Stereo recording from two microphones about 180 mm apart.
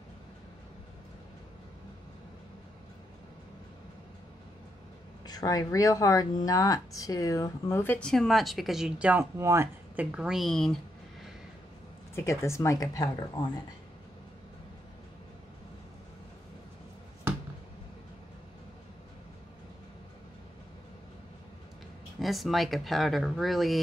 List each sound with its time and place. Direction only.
5.2 s speech: 20° left (ahead or behind); by 10.8 s centre (ahead or behind)
12.2 s speech: 15° left (ahead or behind)
22.2 s speech: centre (ahead or behind)